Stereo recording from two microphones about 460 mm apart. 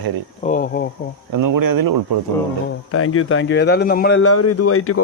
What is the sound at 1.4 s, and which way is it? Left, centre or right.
Speech, right.